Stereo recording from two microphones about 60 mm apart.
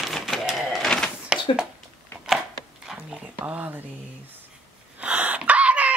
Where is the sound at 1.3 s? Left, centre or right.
Centre.